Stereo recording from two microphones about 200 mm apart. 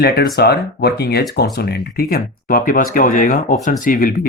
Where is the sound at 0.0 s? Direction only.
55° left (ahead or behind).